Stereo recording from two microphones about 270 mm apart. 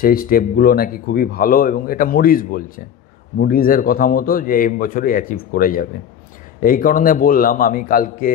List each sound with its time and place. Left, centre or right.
0.0 s speech: left